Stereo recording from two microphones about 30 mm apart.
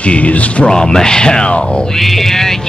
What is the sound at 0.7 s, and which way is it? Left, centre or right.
Speech, left.